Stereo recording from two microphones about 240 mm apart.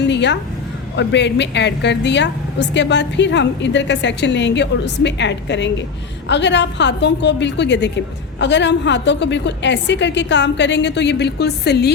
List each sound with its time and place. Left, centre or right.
0.0 s a woman's voice: left